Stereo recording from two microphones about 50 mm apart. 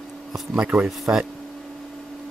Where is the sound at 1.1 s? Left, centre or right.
Right.